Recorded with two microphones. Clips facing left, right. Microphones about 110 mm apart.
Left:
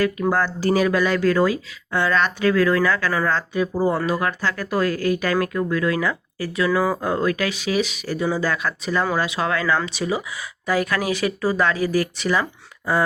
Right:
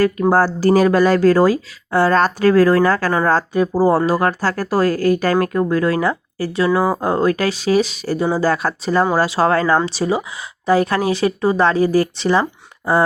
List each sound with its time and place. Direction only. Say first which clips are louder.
0.0 s speech: right 6 dB; 40° right (ahead or behind)